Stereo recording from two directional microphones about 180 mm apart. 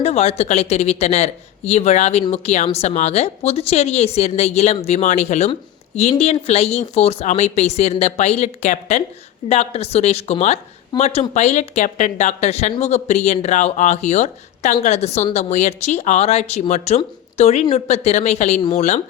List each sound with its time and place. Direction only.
0.0 s a woman's voice: 35° left (ahead or behind)